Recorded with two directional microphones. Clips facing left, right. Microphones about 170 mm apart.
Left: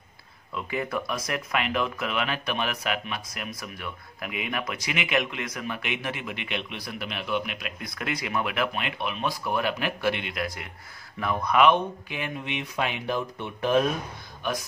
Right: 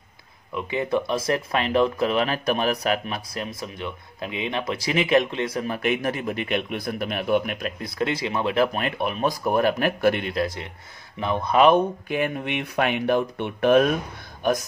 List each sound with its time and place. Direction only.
0.6 s speech: 20° right (ahead or behind); by 7.7 s 45° right (ahead or behind)
7.8 s speech: 25° right (ahead or behind)
8.7 s speech: 45° right (ahead or behind)
10.3 s speech: 25° right (ahead or behind); by 13.8 s 65° right (ahead or behind)